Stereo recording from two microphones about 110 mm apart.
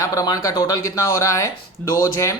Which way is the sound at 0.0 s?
35° left (ahead or behind).